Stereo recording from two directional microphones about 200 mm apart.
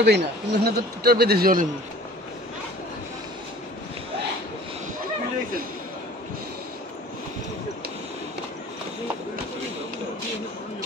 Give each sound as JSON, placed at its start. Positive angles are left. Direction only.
{"t": 0.0, "sound": "speech", "side_deg": -55}